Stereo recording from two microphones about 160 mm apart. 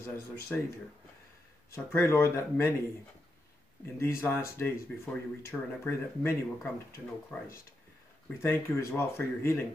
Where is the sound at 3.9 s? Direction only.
15° left (ahead or behind).